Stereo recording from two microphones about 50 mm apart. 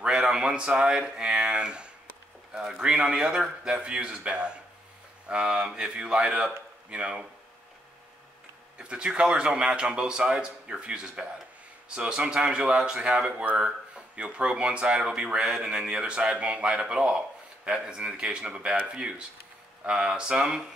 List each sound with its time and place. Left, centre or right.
0.0 s a sound: centre
0.8 s speech: centre
8.7 s speech: centre